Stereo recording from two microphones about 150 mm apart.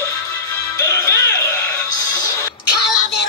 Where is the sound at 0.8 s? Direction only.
20° left (ahead or behind).